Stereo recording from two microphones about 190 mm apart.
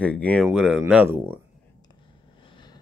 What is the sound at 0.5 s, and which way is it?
Speech, 5° right (ahead or behind).